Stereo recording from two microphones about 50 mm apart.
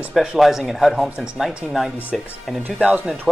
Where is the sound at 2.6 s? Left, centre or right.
Right.